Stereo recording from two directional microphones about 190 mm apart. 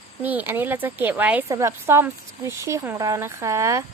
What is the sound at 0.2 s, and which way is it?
A woman's voice, 10° right (ahead or behind).